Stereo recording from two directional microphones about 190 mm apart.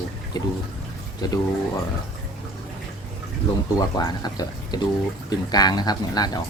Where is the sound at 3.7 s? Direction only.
20° left (ahead or behind).